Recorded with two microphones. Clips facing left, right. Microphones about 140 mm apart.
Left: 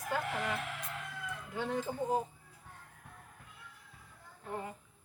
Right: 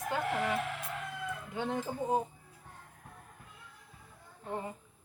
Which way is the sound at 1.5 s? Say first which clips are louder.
Even; 20° right (ahead or behind).